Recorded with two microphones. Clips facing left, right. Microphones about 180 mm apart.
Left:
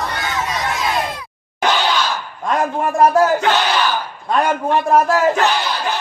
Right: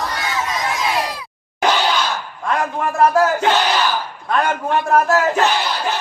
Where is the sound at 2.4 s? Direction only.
25° left (ahead or behind).